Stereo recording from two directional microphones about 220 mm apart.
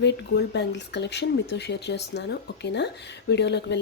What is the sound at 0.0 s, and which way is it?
Speech, 50° left (ahead or behind).